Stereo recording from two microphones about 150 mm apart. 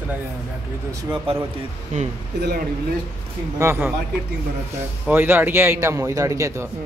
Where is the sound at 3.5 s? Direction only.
15° right (ahead or behind).